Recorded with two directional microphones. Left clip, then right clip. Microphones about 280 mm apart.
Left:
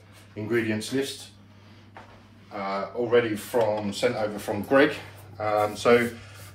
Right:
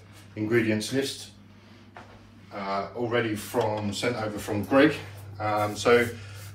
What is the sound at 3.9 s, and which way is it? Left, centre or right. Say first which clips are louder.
A man's voice: left 3 dB; left.